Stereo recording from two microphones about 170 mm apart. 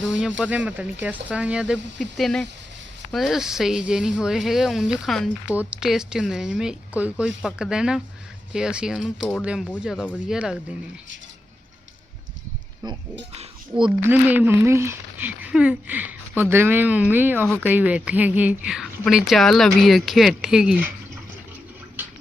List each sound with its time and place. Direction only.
0.1 s a woman's voice: 5° right (ahead or behind)
13.3 s speech: 35° right (ahead or behind)
14.0 s a woman's voice: 10° right (ahead or behind)